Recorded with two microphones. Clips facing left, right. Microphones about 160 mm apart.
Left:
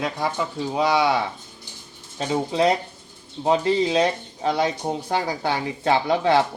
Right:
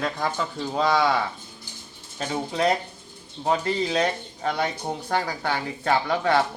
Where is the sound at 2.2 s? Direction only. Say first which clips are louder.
Left 4 dB; 20° left (ahead or behind).